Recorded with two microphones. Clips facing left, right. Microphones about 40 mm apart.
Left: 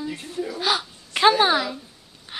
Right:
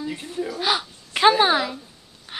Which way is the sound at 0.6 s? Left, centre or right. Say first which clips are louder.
Even; centre.